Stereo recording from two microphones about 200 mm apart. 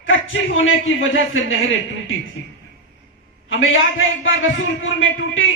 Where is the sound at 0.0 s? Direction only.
75° left (ahead or behind).